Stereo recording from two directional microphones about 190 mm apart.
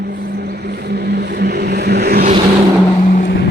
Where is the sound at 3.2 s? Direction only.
60° left (ahead or behind).